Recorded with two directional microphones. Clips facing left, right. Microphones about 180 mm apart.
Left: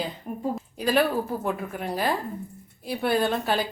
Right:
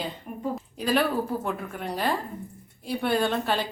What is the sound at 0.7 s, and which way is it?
A woman's voice, centre (ahead or behind).